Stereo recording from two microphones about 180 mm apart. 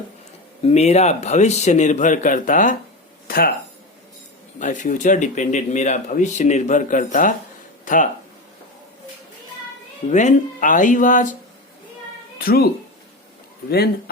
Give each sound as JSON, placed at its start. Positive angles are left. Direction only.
{"t": 0.7, "sound": "speech", "side_deg": 35}
{"t": 4.6, "sound": "speech", "side_deg": 45}
{"t": 10.1, "sound": "speech", "side_deg": 40}
{"t": 12.4, "sound": "speech", "side_deg": 55}
{"t": 13.7, "sound": "speech", "side_deg": 60}